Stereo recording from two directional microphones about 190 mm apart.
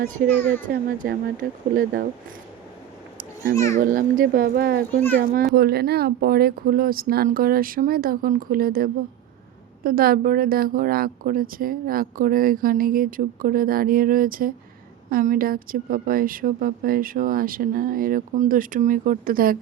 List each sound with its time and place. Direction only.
0.3 s a child's voice: 10° left (ahead or behind)
0.6 s a woman's voice: 45° right (ahead or behind)
3.5 s a child's voice: 15° left (ahead or behind)
3.8 s a woman's voice: 45° right (ahead or behind)